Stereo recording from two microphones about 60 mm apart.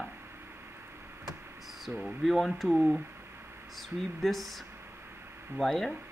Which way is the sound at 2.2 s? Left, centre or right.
Centre.